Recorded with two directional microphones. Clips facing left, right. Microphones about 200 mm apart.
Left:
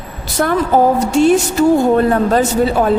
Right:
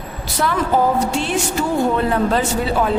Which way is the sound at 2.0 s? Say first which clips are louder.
Left 5 dB; 45° left (ahead or behind).